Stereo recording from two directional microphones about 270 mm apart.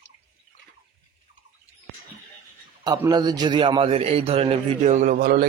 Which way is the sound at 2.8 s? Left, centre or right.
Centre.